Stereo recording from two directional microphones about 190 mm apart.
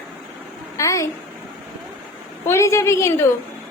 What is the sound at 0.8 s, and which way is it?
Speech, 15° left (ahead or behind).